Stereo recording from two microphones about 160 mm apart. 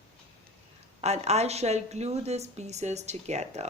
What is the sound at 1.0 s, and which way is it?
A woman's voice, 45° right (ahead or behind).